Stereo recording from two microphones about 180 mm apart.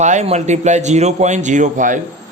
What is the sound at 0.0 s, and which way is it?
A man's voice, 40° right (ahead or behind).